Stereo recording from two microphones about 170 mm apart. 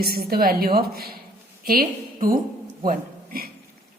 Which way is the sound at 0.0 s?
65° right (ahead or behind).